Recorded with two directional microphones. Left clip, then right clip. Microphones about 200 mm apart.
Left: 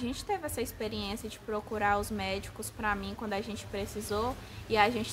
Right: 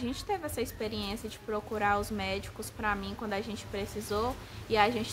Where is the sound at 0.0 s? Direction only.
10° left (ahead or behind).